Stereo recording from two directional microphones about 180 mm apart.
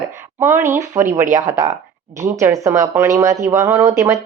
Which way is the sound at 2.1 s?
15° right (ahead or behind).